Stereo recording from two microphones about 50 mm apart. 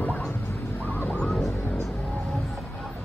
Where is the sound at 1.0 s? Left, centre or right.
Centre.